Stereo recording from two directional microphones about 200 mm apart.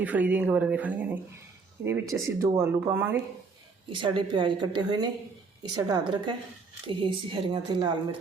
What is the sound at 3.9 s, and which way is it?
Speech, 25° right (ahead or behind).